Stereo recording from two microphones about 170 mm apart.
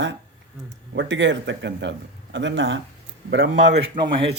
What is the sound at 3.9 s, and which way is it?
Speech, 30° right (ahead or behind).